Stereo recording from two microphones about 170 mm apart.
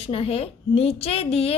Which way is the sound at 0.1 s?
35° left (ahead or behind).